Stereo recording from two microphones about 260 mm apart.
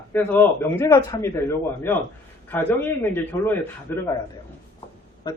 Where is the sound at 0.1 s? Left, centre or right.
Centre.